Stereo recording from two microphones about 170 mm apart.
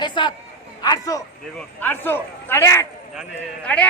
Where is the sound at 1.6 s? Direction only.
10° left (ahead or behind).